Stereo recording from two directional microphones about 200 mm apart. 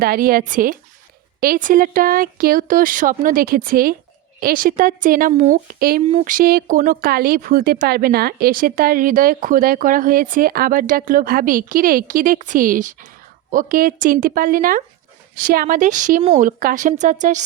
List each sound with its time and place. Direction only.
0.0 s a woman's voice: 45° right (ahead or behind)